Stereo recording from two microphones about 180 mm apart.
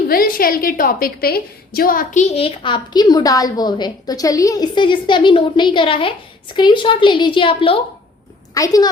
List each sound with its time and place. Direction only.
0.1 s a woman's voice: 55° left (ahead or behind); by 7.8 s 30° left (ahead or behind)
8.5 s a woman's voice: 20° left (ahead or behind)